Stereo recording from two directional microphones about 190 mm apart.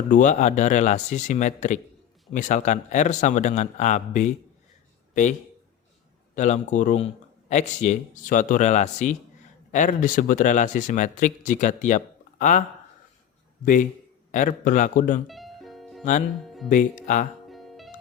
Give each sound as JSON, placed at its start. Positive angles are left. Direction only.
{"t": 0.1, "sound": "speech", "side_deg": 40}
{"t": 6.3, "sound": "speech", "side_deg": 40}
{"t": 14.3, "sound": "speech", "side_deg": 45}
{"t": 15.3, "sound": "music", "side_deg": 0}
{"t": 16.6, "sound": "speech", "side_deg": 40}
{"t": 17.5, "sound": "music", "side_deg": 0}